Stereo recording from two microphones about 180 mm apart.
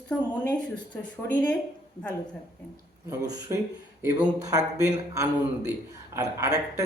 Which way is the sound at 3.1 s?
20° right (ahead or behind).